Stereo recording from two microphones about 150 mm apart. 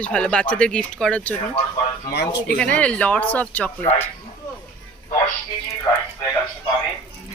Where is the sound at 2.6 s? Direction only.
10° left (ahead or behind).